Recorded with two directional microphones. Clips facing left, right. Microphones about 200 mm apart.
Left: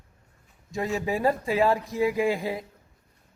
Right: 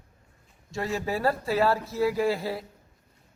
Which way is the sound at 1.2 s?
15° left (ahead or behind).